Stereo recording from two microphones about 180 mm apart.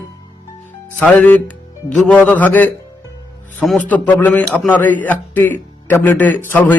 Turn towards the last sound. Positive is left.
turn(degrees=10)  # may be behind; listen again after turning